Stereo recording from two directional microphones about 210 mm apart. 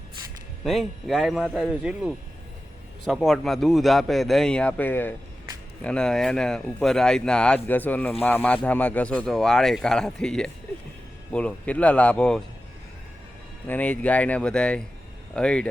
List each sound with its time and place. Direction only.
0.6 s speech: centre (ahead or behind)
13.7 s speech: 10° left (ahead or behind)